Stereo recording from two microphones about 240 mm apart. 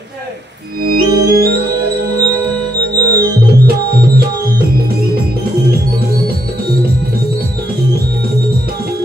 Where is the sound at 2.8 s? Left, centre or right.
Right.